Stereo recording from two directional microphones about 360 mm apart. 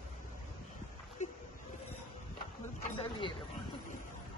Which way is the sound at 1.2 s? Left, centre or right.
Centre.